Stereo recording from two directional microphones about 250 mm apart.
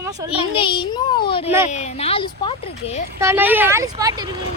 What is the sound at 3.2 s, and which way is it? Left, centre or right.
A woman's voice, centre.